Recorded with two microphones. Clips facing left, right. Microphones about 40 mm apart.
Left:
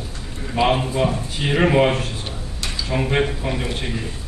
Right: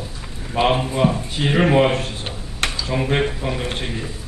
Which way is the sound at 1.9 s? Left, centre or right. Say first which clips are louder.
Right 1 dB; right.